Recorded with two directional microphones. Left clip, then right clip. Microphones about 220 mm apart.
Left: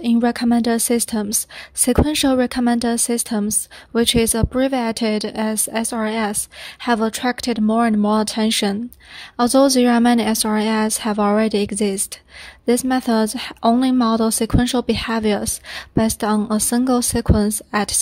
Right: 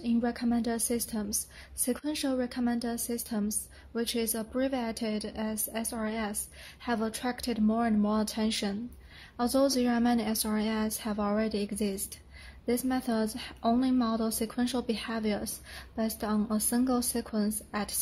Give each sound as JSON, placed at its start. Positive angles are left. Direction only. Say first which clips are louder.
{"t": 0.0, "sound": "speech", "louder": "left 12 dB", "side_deg": 35}